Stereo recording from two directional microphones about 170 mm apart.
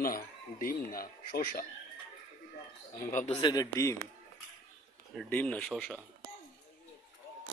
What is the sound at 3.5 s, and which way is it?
Speech, 20° left (ahead or behind).